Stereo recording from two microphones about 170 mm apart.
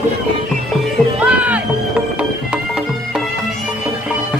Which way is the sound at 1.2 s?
10° right (ahead or behind).